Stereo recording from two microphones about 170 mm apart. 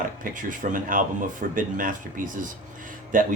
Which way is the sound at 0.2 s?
50° right (ahead or behind).